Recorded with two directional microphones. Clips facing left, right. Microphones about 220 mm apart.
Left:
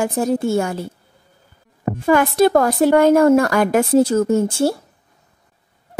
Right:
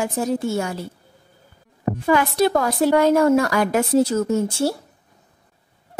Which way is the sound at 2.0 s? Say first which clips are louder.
Left 4 dB; 50° left (ahead or behind).